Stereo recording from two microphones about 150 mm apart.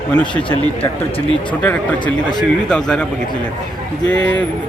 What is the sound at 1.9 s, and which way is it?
Speech, 30° left (ahead or behind).